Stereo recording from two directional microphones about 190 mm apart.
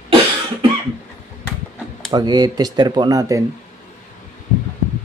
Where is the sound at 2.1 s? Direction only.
20° right (ahead or behind).